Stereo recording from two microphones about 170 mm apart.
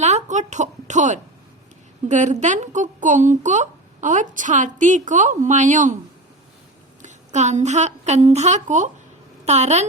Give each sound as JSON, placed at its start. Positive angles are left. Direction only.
{"t": 0.0, "sound": "speech", "side_deg": -45}
{"t": 7.0, "sound": "a woman's voice", "side_deg": -45}